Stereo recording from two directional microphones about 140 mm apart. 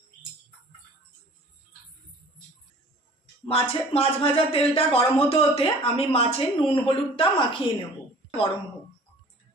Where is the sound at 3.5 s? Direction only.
45° left (ahead or behind).